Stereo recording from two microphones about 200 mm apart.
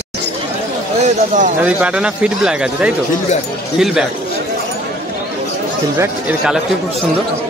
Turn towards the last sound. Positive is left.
turn(degrees=-5)  # may be behind; listen again after turning